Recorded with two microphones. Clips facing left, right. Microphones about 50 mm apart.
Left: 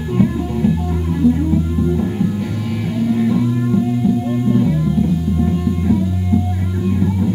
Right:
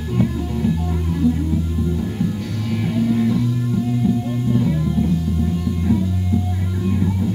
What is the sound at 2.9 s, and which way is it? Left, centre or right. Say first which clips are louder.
Music: left 2 dB; centre.